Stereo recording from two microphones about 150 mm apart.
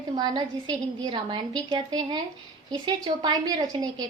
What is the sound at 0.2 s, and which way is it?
A woman's voice, 25° right (ahead or behind).